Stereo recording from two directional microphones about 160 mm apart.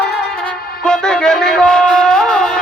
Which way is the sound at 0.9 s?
5° left (ahead or behind).